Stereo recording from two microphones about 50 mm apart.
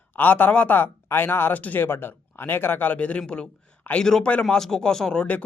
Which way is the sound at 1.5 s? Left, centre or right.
Left.